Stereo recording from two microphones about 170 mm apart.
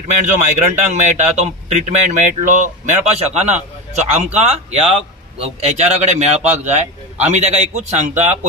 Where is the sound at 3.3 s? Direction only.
40° right (ahead or behind).